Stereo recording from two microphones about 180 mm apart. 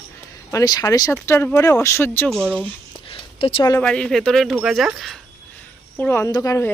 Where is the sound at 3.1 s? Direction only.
30° left (ahead or behind).